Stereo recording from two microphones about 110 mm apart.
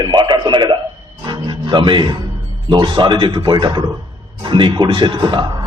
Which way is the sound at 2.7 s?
45° right (ahead or behind).